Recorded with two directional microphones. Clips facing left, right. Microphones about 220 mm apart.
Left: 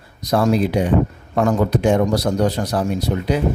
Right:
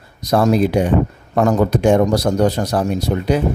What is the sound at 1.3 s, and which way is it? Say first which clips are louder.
Speech: right 2 dB; 45° right (ahead or behind).